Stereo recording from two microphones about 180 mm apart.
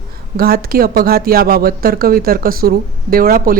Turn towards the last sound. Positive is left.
turn(degrees=-55)  # may be behind; listen again after turning